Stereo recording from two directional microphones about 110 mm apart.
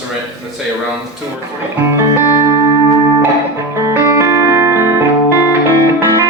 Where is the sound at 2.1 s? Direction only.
25° right (ahead or behind).